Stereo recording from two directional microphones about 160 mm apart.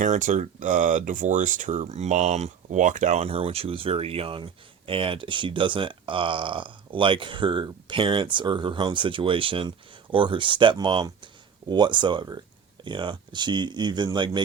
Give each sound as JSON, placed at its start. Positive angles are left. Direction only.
{"t": 0.0, "sound": "speech", "side_deg": -50}